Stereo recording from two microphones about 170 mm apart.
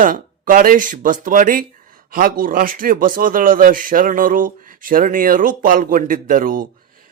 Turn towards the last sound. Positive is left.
turn(degrees=-55)  # may be behind; listen again after turning